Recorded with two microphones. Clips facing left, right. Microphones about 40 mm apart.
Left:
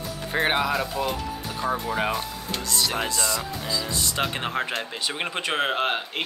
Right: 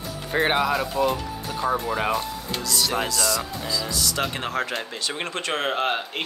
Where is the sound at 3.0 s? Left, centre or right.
Left.